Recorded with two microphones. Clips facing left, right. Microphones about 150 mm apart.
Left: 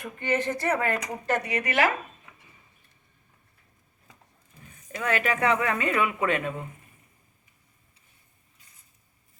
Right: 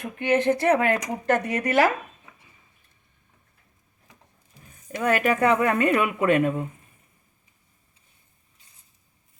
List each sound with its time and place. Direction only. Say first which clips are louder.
0.0 s speech: right 6 dB; 65° right (ahead or behind)
1.3 s speech: right 5 dB; 50° right (ahead or behind)
4.9 s speech: right 5 dB; 45° right (ahead or behind)